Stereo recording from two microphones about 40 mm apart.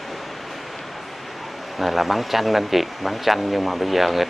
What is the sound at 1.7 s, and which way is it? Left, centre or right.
Speech, centre.